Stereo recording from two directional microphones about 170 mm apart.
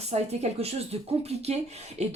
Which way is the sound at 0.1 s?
40° right (ahead or behind).